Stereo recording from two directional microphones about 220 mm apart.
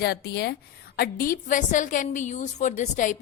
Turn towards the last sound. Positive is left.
turn(degrees=35)  # may be behind; listen again after turning